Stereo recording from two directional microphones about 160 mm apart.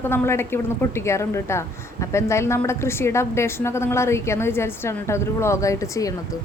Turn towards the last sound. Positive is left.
turn(degrees=20)  # may be behind; listen again after turning